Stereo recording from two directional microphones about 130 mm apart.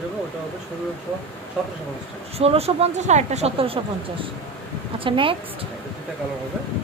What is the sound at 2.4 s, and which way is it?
A woman's voice, 50° right (ahead or behind).